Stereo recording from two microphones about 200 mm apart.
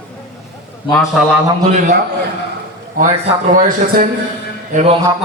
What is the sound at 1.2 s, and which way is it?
Speech, 5° left (ahead or behind).